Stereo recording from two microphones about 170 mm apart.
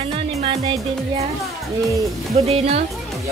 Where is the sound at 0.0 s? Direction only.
30° right (ahead or behind).